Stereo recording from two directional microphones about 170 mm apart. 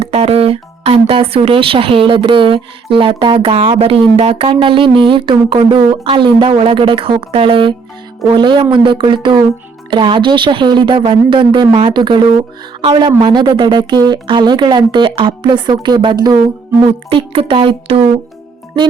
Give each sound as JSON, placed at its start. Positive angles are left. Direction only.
{"t": 0.0, "sound": "speech", "side_deg": -35}